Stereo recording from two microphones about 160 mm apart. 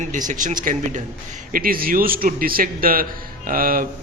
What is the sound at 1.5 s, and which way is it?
A man's voice, 65° right (ahead or behind).